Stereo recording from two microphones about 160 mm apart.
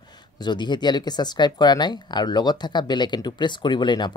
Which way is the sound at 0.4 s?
30° left (ahead or behind).